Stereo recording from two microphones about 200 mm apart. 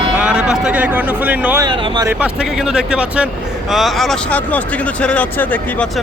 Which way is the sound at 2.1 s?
5° right (ahead or behind).